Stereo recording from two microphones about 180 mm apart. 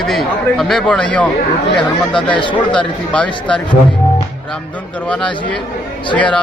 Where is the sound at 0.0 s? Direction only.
Centre (ahead or behind).